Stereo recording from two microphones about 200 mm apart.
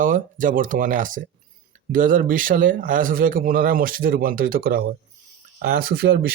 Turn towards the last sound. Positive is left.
turn(degrees=-50)  # may be behind; listen again after turning